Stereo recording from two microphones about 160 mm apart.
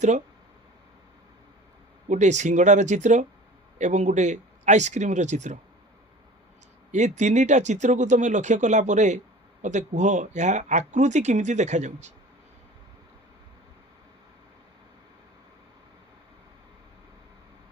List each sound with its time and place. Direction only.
2.0 s speech: 45° right (ahead or behind)
6.9 s speech: 50° right (ahead or behind)